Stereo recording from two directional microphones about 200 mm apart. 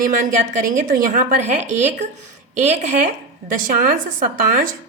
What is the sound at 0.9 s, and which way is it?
A woman's voice, 40° right (ahead or behind).